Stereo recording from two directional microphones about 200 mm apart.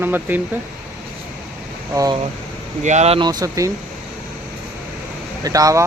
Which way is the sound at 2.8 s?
35° right (ahead or behind).